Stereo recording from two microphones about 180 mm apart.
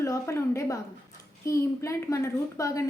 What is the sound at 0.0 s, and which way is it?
A woman's voice, 15° left (ahead or behind).